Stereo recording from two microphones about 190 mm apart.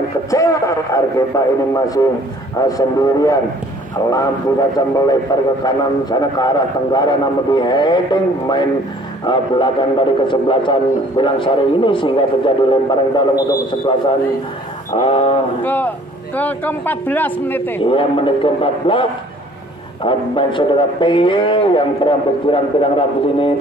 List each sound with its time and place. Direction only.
0.3 s a man's voice: 15° left (ahead or behind)
2.6 s a man's voice: 20° left (ahead or behind)
15.6 s a man's voice: 10° left (ahead or behind)
17.8 s a man's voice: 25° left (ahead or behind)